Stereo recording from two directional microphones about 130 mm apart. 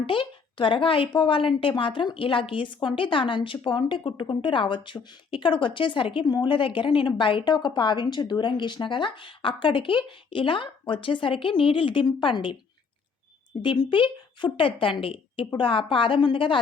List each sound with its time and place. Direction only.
0.0 s a woman's voice: 40° left (ahead or behind)
13.6 s a woman's voice: 40° left (ahead or behind)